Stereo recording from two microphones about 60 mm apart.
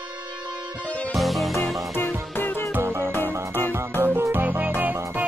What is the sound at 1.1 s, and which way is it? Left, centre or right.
Music, centre.